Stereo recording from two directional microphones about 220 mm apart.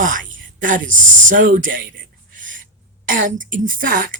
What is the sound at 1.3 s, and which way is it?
Speech, 35° right (ahead or behind).